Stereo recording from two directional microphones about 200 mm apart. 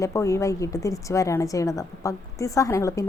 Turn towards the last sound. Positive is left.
turn(degrees=15)  # may be behind; listen again after turning